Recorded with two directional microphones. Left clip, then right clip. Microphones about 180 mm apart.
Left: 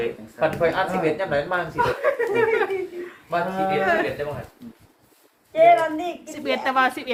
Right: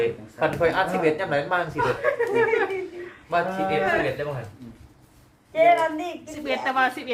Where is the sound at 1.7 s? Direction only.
50° left (ahead or behind).